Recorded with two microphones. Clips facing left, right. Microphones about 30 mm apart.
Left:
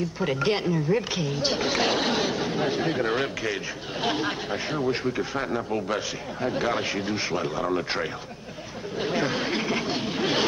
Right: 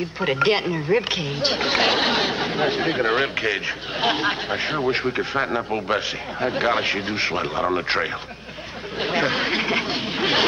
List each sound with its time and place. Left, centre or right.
0.0 s a man's voice: right